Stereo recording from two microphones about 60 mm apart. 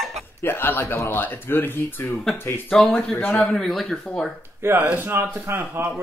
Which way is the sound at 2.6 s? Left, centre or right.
Centre.